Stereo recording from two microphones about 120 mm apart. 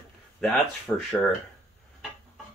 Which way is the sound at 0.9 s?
15° left (ahead or behind).